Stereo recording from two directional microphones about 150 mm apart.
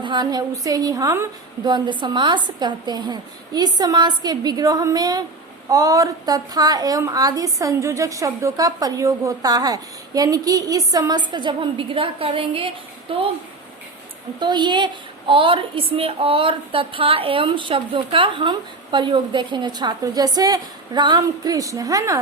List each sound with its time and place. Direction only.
0.0 s a woman's voice: 30° right (ahead or behind)
14.3 s a woman's voice: 30° right (ahead or behind)